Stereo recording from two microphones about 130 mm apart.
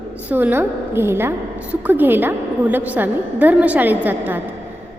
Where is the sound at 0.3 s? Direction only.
15° right (ahead or behind).